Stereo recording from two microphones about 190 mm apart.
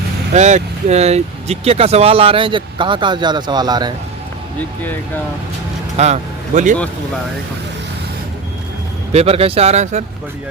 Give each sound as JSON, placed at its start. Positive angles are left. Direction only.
{"t": 0.3, "sound": "speech", "side_deg": -35}
{"t": 4.8, "sound": "speech", "side_deg": 10}
{"t": 6.0, "sound": "speech", "side_deg": -35}
{"t": 9.1, "sound": "speech", "side_deg": -30}